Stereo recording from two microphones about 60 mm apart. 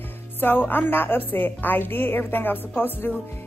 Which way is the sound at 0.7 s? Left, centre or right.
Left.